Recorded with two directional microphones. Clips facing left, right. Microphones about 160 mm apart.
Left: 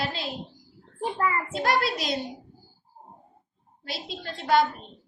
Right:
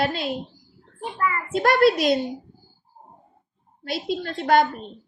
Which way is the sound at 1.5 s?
60° right (ahead or behind).